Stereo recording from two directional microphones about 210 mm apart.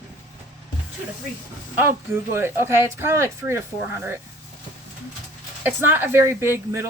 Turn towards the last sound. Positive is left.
turn(degrees=-15)  # may be behind; listen again after turning